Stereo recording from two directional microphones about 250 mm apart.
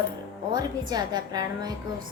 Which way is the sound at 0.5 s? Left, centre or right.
Centre.